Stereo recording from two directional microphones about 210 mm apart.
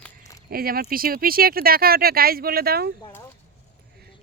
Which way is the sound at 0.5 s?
45° right (ahead or behind).